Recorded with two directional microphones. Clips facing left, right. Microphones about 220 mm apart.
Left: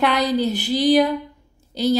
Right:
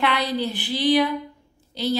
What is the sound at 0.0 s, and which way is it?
A woman's voice, 45° left (ahead or behind).